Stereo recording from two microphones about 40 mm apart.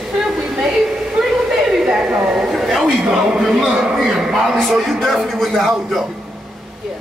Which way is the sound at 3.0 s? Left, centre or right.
Centre.